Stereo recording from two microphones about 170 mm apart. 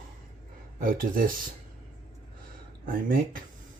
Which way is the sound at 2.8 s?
55° right (ahead or behind).